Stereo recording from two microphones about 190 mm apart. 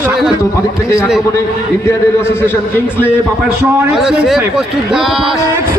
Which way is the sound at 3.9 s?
5° right (ahead or behind).